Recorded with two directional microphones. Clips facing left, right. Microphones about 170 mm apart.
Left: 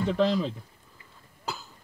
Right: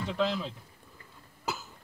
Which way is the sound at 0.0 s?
45° left (ahead or behind).